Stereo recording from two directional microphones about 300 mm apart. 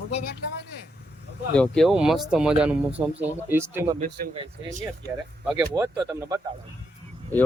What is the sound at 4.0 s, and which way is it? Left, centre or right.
Speech, right.